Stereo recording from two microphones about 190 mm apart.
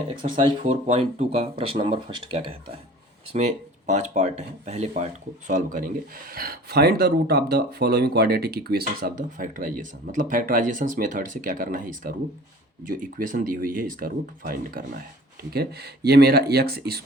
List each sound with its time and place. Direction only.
0.2 s speech: 35° right (ahead or behind); by 17.0 s 55° right (ahead or behind)